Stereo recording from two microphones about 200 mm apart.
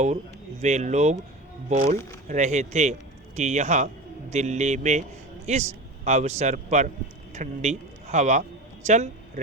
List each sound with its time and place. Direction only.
0.6 s a man's voice: 35° right (ahead or behind)